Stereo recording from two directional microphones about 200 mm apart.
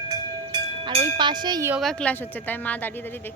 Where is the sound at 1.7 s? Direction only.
Centre (ahead or behind).